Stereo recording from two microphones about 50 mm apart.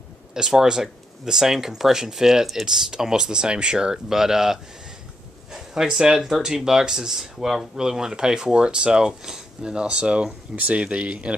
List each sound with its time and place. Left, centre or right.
0.3 s speech: centre; by 11.3 s right